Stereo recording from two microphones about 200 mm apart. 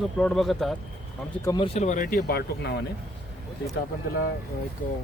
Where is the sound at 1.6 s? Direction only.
35° left (ahead or behind); by 2.7 s 50° left (ahead or behind).